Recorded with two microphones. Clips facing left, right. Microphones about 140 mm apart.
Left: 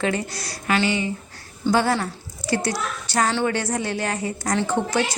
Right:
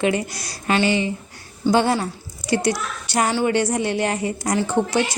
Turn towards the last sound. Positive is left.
turn(degrees=-10)  # may be behind; listen again after turning